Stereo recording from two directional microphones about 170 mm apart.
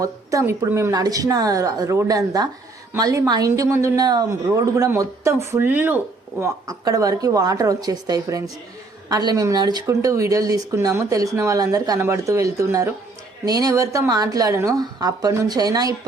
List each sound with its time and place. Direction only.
0.0 s speech: 20° right (ahead or behind)